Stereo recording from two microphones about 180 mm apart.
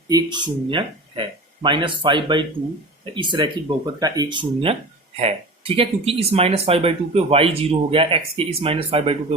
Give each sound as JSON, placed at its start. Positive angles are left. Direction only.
{"t": 0.1, "sound": "speech", "side_deg": -25}